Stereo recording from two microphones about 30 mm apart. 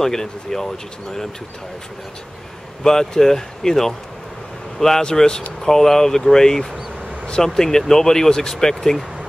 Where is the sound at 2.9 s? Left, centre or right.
Centre.